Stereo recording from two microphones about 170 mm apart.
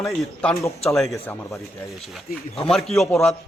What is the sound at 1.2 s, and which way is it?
Speech, 20° left (ahead or behind).